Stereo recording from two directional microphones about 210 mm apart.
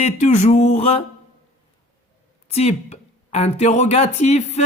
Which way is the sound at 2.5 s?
30° left (ahead or behind).